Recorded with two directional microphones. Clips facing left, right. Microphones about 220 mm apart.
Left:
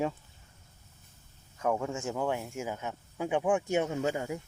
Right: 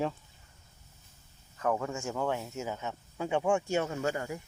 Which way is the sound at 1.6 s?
10° left (ahead or behind).